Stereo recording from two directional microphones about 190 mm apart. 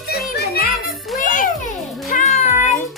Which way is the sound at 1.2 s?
45° left (ahead or behind).